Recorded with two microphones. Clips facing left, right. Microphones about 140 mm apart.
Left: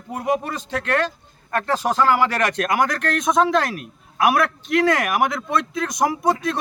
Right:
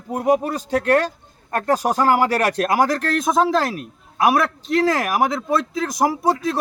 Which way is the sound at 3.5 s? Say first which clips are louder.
Right 1 dB; 30° right (ahead or behind).